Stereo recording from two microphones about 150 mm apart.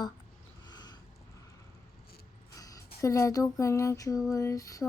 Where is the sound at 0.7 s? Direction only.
30° left (ahead or behind).